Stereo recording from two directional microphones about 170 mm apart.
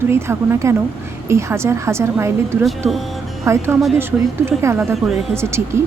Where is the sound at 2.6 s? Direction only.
Centre (ahead or behind).